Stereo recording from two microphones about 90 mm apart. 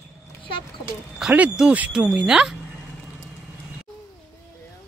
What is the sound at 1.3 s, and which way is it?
Speech, 10° right (ahead or behind).